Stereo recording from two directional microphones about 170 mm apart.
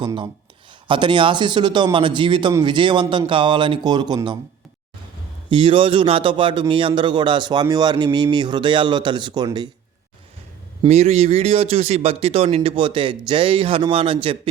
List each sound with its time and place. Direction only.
0.0 s a man's voice: 25° right (ahead or behind)
5.5 s a man's voice: 30° right (ahead or behind)
10.8 s a man's voice: 40° right (ahead or behind)